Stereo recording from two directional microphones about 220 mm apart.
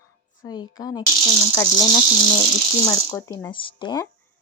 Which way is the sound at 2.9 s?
10° left (ahead or behind).